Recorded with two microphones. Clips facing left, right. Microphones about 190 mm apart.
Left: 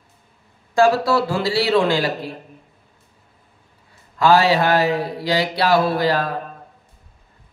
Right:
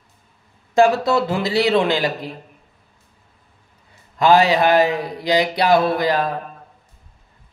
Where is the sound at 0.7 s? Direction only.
20° right (ahead or behind).